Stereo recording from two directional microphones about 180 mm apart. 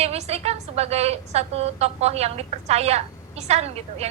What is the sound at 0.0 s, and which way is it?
A woman's voice, 35° right (ahead or behind).